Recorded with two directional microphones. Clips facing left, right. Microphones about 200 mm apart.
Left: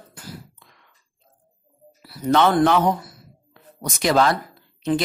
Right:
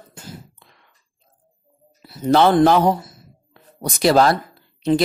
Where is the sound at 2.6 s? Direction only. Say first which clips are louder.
Right 3 dB; 35° right (ahead or behind).